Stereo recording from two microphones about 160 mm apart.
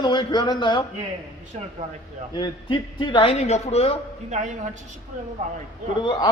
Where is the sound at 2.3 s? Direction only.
30° left (ahead or behind).